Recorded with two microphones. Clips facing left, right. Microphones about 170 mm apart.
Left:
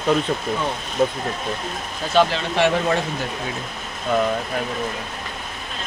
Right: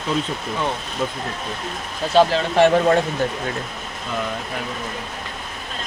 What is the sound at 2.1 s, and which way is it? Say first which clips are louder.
Speech: right 3 dB; 35° right (ahead or behind).